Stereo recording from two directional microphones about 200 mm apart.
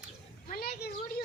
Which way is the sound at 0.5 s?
50° left (ahead or behind).